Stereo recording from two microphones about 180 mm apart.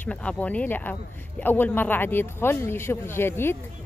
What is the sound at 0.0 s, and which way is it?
Speech, 5° left (ahead or behind).